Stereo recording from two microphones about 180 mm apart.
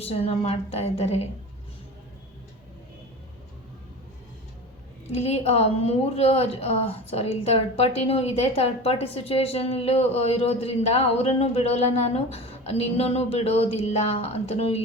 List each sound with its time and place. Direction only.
0.0 s a woman's voice: 35° left (ahead or behind)
5.1 s a woman's voice: 35° left (ahead or behind)